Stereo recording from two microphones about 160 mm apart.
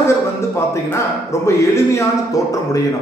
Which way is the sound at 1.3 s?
20° left (ahead or behind).